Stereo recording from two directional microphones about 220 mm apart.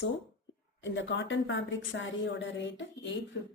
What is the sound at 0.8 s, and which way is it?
A woman's voice, 60° left (ahead or behind).